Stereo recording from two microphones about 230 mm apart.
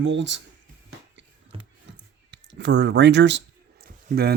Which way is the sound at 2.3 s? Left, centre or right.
Right.